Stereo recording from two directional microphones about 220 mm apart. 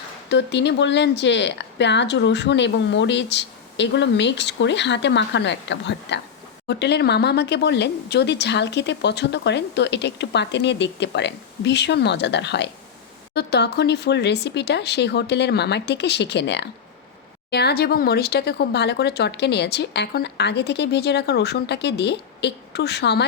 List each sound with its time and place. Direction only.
0.3 s speech: 55° left (ahead or behind)